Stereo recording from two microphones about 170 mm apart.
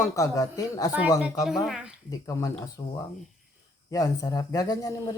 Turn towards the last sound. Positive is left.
turn(degrees=20)  # may be behind; listen again after turning